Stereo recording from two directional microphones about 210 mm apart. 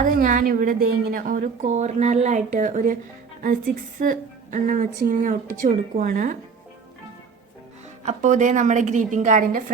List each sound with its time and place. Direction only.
0.0 s a woman's voice: 40° right (ahead or behind)
4.0 s a woman's voice: 40° right (ahead or behind)
8.0 s a woman's voice: 35° right (ahead or behind)